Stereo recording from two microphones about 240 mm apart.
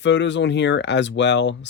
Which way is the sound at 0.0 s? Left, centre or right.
Left.